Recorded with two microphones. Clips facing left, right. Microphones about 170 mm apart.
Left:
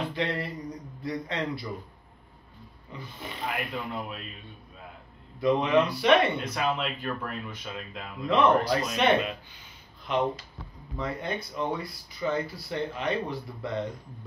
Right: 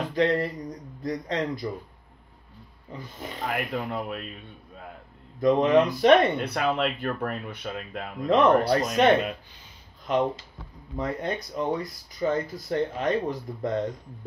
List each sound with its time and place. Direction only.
0.1 s a sound: 40° right (ahead or behind)
1.2 s speech: 40° right (ahead or behind)
2.9 s speech: 40° right (ahead or behind)
5.4 s speech: 45° right (ahead or behind)
6.4 s speech: 65° right (ahead or behind); by 13.7 s 45° right (ahead or behind)